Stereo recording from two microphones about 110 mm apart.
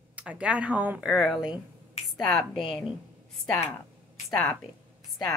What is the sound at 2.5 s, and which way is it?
Speech, 50° left (ahead or behind).